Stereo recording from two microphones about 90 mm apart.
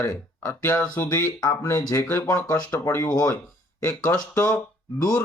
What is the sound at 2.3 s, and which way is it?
Speech, 25° left (ahead or behind).